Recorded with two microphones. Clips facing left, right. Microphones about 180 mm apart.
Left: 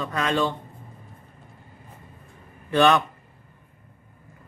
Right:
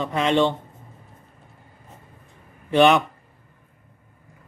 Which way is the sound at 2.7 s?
10° right (ahead or behind).